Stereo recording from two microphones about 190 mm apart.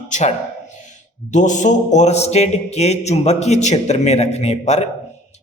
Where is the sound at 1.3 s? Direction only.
40° left (ahead or behind).